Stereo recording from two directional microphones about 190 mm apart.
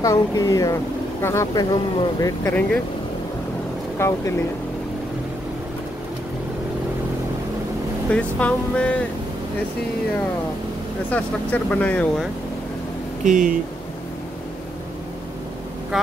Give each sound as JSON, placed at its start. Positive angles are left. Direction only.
{"t": 0.0, "sound": "speech", "side_deg": 15}
{"t": 4.0, "sound": "speech", "side_deg": 15}
{"t": 8.1, "sound": "speech", "side_deg": 5}
{"t": 11.1, "sound": "speech", "side_deg": 10}
{"t": 13.2, "sound": "speech", "side_deg": -45}